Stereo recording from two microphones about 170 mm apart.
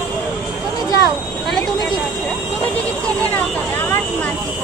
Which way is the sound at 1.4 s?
Centre (ahead or behind).